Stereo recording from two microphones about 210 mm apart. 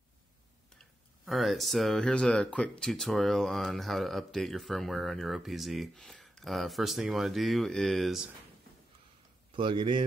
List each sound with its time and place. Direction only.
1.2 s speech: centre (ahead or behind)
9.5 s a man's voice: 25° right (ahead or behind)